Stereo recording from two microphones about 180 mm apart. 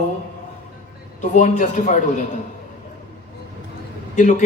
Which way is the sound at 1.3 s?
45° left (ahead or behind).